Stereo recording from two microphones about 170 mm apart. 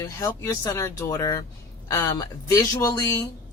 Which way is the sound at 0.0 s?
15° left (ahead or behind).